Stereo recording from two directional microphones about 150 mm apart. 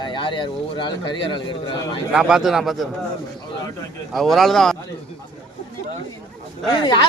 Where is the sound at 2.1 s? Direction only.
5° right (ahead or behind).